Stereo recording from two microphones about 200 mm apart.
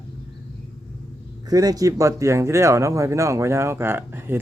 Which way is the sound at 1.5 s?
20° right (ahead or behind).